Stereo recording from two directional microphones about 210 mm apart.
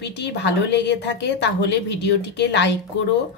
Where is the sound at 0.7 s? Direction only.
55° left (ahead or behind).